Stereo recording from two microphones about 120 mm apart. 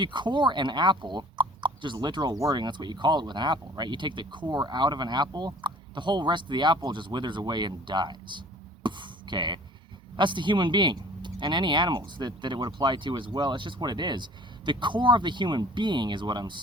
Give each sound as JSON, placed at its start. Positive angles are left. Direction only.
{"t": 0.0, "sound": "speech", "side_deg": -40}